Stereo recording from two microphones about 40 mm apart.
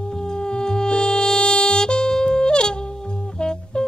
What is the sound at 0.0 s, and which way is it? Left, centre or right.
Music, centre.